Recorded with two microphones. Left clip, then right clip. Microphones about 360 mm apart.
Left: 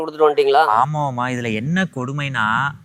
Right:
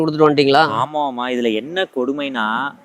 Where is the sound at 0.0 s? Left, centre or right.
Right.